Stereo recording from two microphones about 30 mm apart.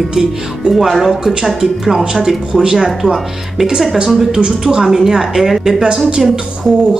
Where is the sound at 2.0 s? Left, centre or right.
Right.